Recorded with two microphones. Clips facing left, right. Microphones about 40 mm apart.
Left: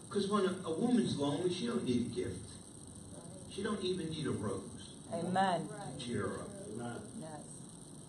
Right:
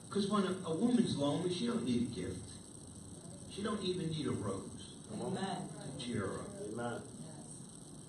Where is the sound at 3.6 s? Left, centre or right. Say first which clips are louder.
Left 1 dB; centre.